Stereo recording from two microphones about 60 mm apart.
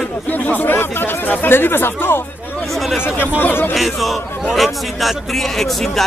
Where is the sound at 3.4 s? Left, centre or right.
Left.